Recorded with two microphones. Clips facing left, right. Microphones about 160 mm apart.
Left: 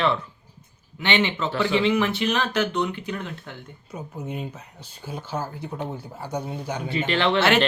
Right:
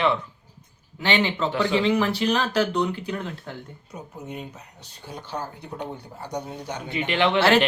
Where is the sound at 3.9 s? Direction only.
Centre (ahead or behind).